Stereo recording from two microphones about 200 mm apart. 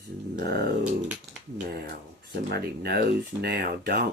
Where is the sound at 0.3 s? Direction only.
50° right (ahead or behind).